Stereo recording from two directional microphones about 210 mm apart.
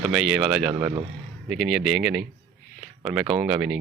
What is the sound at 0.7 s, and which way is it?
Speech, 20° right (ahead or behind).